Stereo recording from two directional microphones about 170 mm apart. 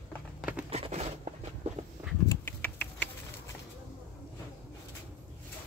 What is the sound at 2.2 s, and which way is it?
Rodents, 10° left (ahead or behind).